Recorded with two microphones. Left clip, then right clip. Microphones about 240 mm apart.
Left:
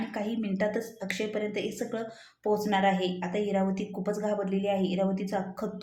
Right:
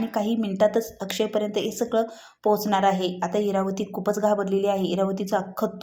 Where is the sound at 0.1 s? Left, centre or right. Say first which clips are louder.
Right 7 dB; right.